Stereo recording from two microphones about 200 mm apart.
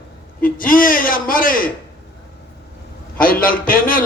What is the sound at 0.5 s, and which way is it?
A man's voice, 45° left (ahead or behind).